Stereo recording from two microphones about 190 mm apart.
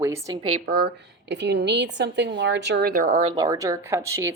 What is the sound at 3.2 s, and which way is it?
A woman's voice, 25° right (ahead or behind).